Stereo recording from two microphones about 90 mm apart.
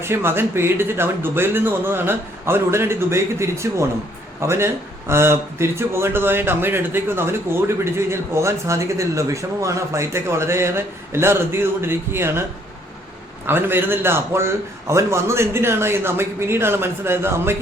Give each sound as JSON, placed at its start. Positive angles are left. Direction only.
{"t": 0.0, "sound": "speech", "side_deg": -25}
{"t": 13.5, "sound": "speech", "side_deg": -25}